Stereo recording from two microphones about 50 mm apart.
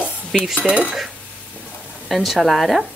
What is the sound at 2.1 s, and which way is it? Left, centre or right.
Speech, centre.